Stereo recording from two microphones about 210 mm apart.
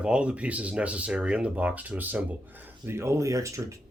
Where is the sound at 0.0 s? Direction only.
5° right (ahead or behind).